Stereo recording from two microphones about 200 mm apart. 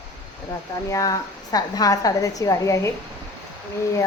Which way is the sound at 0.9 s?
15° left (ahead or behind).